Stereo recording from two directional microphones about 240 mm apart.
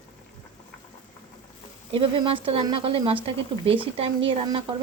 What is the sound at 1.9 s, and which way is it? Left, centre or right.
Speech, right.